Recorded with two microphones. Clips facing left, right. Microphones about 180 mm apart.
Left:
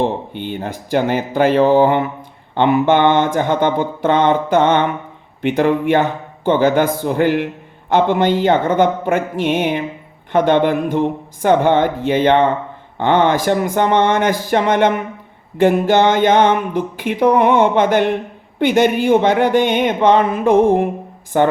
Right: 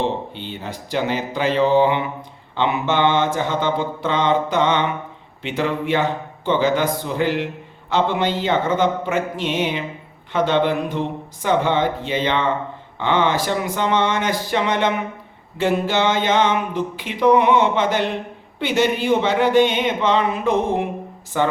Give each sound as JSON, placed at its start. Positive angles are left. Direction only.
{"t": 0.0, "sound": "speech", "side_deg": 55}